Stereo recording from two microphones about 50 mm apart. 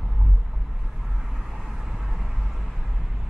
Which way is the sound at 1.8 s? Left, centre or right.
Centre.